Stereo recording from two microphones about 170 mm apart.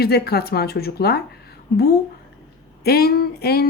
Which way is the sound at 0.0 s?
70° left (ahead or behind).